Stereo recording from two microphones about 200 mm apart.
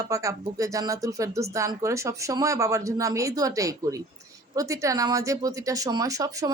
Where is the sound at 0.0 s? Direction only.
15° right (ahead or behind).